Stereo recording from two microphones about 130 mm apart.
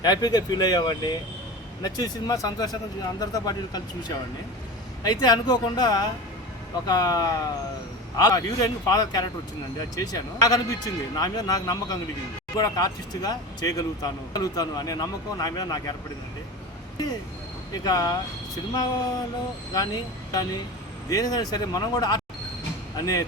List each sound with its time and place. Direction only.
0.0 s speech: 30° left (ahead or behind)
17.8 s speech: 30° left (ahead or behind)
19.7 s speech: 30° left (ahead or behind)